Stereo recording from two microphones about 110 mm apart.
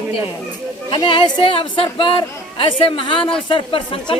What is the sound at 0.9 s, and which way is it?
A woman's voice, 45° left (ahead or behind).